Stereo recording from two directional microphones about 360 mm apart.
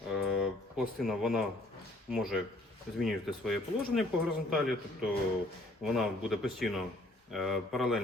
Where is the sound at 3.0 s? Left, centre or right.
Centre.